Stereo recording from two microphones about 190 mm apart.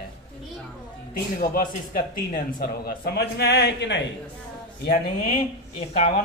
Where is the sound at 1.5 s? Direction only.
45° left (ahead or behind); by 4.0 s 65° left (ahead or behind).